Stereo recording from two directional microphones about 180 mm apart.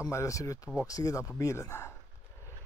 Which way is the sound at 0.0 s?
15° left (ahead or behind).